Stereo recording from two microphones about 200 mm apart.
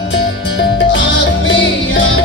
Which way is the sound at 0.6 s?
65° left (ahead or behind).